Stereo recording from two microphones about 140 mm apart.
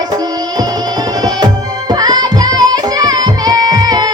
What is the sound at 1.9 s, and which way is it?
Music, 30° right (ahead or behind).